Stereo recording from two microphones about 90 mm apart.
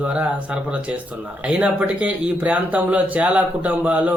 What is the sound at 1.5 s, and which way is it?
Speech, 15° right (ahead or behind).